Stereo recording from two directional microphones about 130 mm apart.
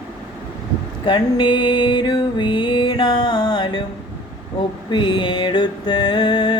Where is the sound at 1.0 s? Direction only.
40° left (ahead or behind).